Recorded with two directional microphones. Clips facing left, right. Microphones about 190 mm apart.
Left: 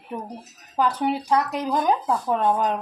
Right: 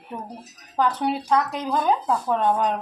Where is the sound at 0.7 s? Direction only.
10° left (ahead or behind).